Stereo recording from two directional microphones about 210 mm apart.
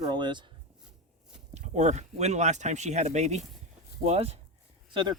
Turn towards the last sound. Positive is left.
turn(degrees=-20)  # may be behind; listen again after turning